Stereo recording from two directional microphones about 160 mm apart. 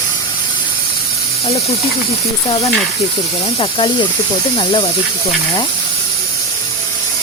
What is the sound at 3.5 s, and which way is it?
Speech, 35° left (ahead or behind).